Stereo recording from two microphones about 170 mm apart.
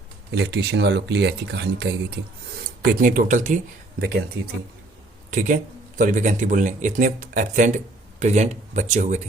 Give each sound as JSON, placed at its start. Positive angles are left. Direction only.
{"t": 0.3, "sound": "speech", "side_deg": -80}
{"t": 2.6, "sound": "speech", "side_deg": -65}
{"t": 5.3, "sound": "speech", "side_deg": -50}